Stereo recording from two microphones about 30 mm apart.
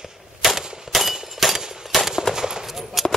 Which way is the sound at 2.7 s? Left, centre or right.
Centre.